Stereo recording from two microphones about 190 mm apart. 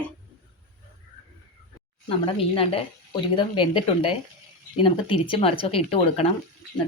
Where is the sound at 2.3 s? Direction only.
30° left (ahead or behind).